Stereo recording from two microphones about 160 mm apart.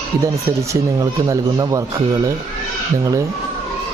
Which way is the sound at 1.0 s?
20° right (ahead or behind).